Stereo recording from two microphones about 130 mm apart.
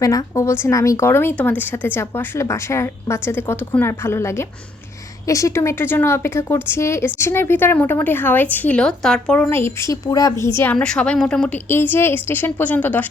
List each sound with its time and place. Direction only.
0.0 s speech: 25° left (ahead or behind)